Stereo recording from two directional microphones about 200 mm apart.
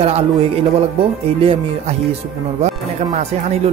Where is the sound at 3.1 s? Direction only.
35° right (ahead or behind).